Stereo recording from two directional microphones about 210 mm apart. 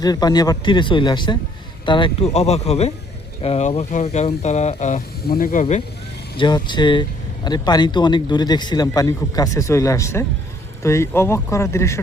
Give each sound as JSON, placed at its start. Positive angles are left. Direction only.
{"t": 0.0, "sound": "a man's voice", "side_deg": 20}
{"t": 6.3, "sound": "a man's voice", "side_deg": 20}